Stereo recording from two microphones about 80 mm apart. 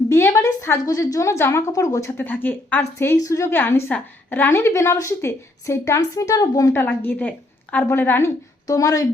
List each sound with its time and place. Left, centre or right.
0.1 s a woman's voice: left
2.2 s a woman's voice: left
3.2 s speech: left
3.5 s a woman's voice: left
6.8 s a woman's voice: centre
8.6 s speech: left